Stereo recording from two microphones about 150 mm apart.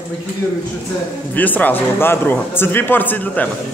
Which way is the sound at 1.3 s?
10° left (ahead or behind).